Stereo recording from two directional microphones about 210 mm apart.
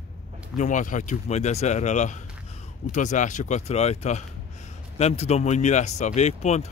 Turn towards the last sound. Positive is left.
turn(degrees=30)  # may be behind; listen again after turning